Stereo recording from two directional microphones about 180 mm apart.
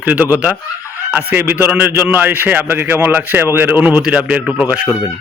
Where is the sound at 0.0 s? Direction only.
10° right (ahead or behind).